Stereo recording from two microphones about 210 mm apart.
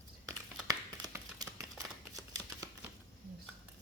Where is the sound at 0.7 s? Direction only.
15° right (ahead or behind).